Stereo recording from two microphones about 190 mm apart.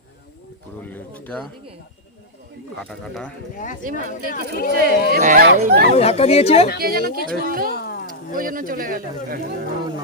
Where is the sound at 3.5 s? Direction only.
45° left (ahead or behind).